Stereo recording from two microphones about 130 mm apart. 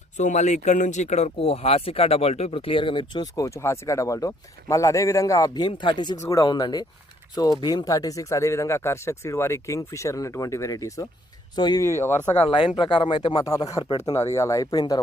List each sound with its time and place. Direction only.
0.2 s speech: 65° left (ahead or behind); by 6.1 s 35° left (ahead or behind)
6.1 s speech: 25° left (ahead or behind)
12.5 s speech: 40° left (ahead or behind)